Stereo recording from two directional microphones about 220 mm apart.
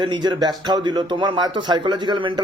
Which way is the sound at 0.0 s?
20° right (ahead or behind).